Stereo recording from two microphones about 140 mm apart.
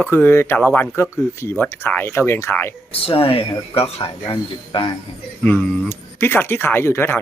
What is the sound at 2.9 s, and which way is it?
Speech, 40° left (ahead or behind).